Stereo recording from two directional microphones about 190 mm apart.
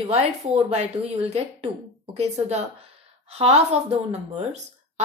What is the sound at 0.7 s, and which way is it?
Speech, 35° right (ahead or behind).